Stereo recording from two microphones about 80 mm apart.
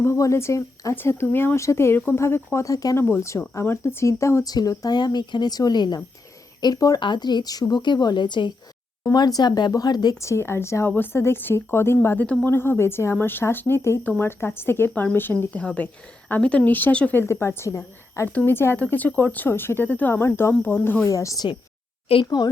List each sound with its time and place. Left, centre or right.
0.0 s a woman's voice: left
4.4 s speech: left
6.6 s speech: left
7.0 s a woman's voice: left
9.1 s speech: left
10.2 s a woman's voice: left; by 17.2 s centre
17.2 s a woman's voice: left
18.3 s speech: left
21.1 s speech: left
22.2 s speech: left